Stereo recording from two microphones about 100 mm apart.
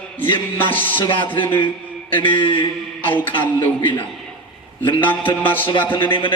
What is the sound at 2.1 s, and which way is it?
Speech, 60° left (ahead or behind).